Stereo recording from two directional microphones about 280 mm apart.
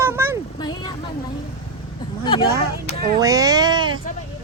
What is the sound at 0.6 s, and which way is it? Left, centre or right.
Speech, centre.